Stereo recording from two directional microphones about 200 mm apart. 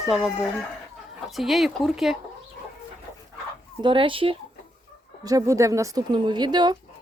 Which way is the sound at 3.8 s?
25° right (ahead or behind).